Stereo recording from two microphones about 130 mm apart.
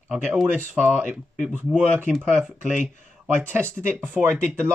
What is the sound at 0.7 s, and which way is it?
Speech, 15° right (ahead or behind).